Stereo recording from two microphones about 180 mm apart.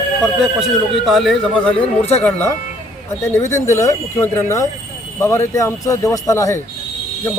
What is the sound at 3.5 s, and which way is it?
Speech, 15° left (ahead or behind).